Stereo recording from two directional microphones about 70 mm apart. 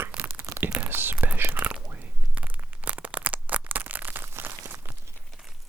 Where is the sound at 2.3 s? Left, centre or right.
Right.